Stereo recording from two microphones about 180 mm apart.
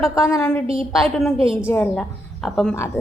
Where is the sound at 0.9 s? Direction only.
Centre (ahead or behind).